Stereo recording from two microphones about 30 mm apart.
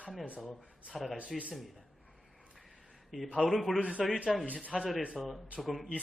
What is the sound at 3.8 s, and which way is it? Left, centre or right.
Speech, left.